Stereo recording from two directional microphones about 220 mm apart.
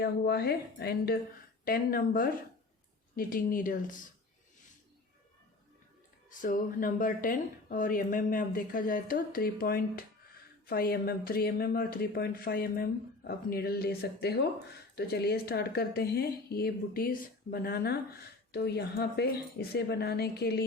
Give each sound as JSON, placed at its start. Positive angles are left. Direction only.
{"t": 0.0, "sound": "speech", "side_deg": 45}
{"t": 6.4, "sound": "speech", "side_deg": 40}